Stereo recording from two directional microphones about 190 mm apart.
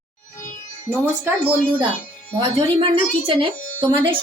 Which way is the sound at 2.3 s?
25° right (ahead or behind).